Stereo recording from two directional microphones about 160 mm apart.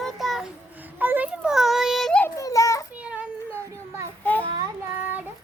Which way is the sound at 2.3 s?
20° left (ahead or behind).